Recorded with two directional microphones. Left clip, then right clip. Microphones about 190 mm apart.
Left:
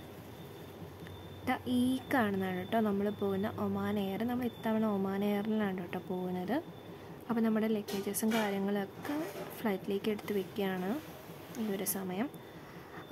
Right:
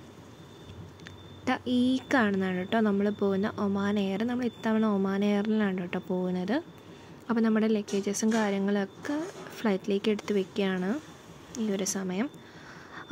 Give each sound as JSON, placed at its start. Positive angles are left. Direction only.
{"t": 1.4, "sound": "speech", "side_deg": -15}